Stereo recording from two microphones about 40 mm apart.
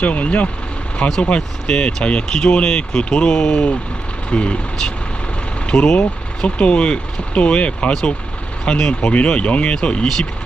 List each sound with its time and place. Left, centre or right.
0.0 s speech: left
1.7 s speech: centre
5.7 s speech: left